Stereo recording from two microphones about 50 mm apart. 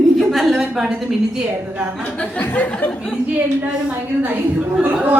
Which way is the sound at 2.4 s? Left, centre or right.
Left.